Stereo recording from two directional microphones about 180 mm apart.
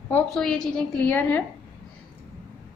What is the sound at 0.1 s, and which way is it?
A woman's voice, 5° left (ahead or behind).